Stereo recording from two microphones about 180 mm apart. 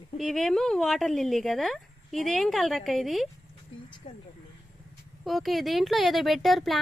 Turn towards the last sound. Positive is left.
turn(degrees=0)  # may be behind; listen again after turning